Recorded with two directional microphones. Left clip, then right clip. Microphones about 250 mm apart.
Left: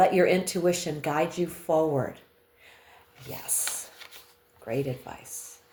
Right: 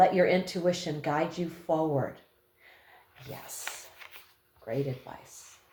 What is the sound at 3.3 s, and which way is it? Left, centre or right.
Speech, left.